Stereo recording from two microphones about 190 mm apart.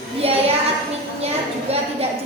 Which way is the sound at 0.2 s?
30° right (ahead or behind).